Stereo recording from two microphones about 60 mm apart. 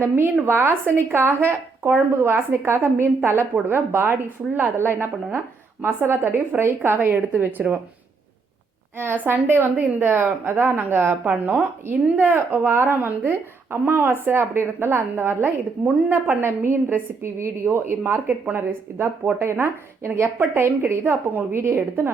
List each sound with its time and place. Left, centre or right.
0.0 s a woman's voice: right
3.2 s a woman's voice: right
9.0 s a woman's voice: right
12.0 s speech: right
12.3 s a woman's voice: right